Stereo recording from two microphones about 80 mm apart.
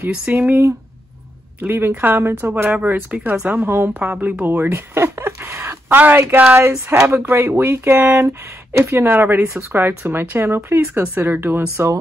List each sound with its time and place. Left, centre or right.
0.1 s speech: centre; by 12.0 s right